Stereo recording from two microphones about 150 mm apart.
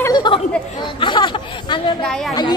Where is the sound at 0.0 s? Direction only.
30° left (ahead or behind).